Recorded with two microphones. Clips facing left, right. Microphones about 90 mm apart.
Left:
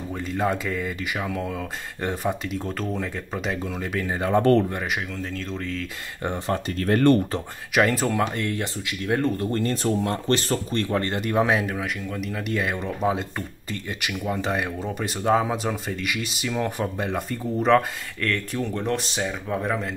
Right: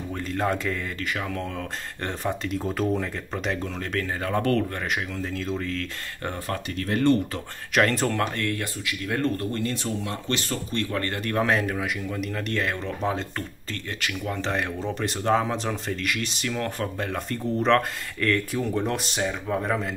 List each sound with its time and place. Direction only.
0.3 s speech: 5° left (ahead or behind)
4.2 s speech: 25° left (ahead or behind)
5.3 s speech: centre (ahead or behind)
6.2 s speech: 20° left (ahead or behind)
6.8 s speech: 50° left (ahead or behind)
7.7 s speech: 5° left (ahead or behind)
8.4 s speech: 20° left (ahead or behind)
9.5 s speech: 40° left (ahead or behind); by 11.6 s 15° left (ahead or behind)
11.6 s speech: centre (ahead or behind)